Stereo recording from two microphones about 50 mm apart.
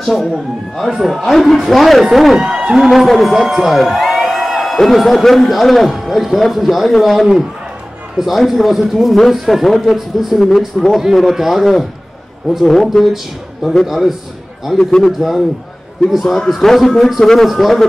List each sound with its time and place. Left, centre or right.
0.0 s a man's voice: centre
2.4 s speech: centre
2.8 s a man's voice: centre
14.9 s a man's voice: centre
15.1 s a man's voice: centre